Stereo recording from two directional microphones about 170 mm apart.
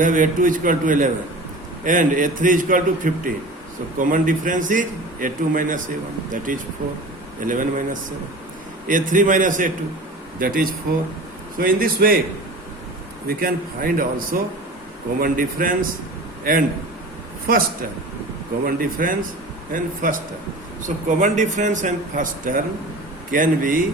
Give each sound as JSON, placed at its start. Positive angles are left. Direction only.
{"t": 0.0, "sound": "a man's voice", "side_deg": -50}
{"t": 8.9, "sound": "a man's voice", "side_deg": -50}
{"t": 13.2, "sound": "a man's voice", "side_deg": -60}